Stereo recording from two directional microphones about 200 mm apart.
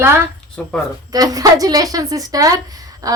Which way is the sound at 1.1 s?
20° right (ahead or behind).